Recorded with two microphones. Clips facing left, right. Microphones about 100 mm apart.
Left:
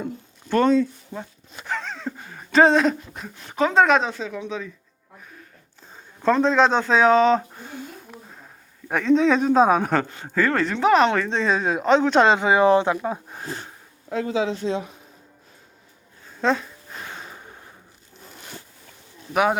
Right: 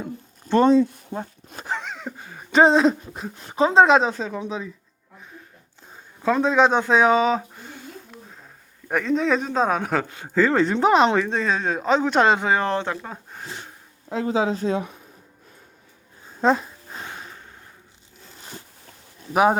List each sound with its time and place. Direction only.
0.7 s speech: 35° right (ahead or behind)
1.8 s a sound: 10° right (ahead or behind)
2.7 s speech: 30° right (ahead or behind)
5.9 s speech: 5° right (ahead or behind)
8.9 s speech: 5° right (ahead or behind)
10.2 s speech: 15° right (ahead or behind)
10.8 s speech: 30° right (ahead or behind)
11.2 s speech: 5° right (ahead or behind)
14.1 s speech: 35° right (ahead or behind)
16.4 s a sound: 35° right (ahead or behind)
19.3 s speech: 30° right (ahead or behind)